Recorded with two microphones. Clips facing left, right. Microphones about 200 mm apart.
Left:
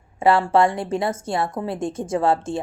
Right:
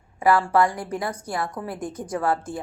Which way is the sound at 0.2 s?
25° left (ahead or behind).